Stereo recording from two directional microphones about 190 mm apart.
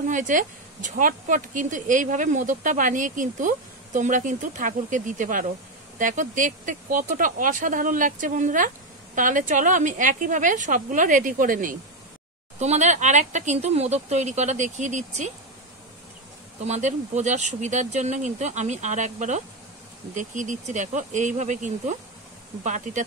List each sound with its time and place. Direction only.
0.1 s speech: 40° right (ahead or behind)
16.6 s speech: 35° right (ahead or behind)